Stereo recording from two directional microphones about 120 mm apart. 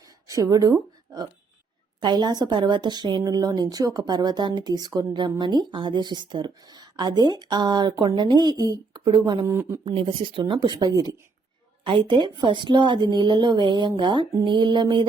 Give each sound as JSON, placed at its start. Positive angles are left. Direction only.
{"t": 0.3, "sound": "a woman's voice", "side_deg": -30}
{"t": 9.5, "sound": "speech", "side_deg": -25}
{"t": 9.8, "sound": "a woman's voice", "side_deg": -45}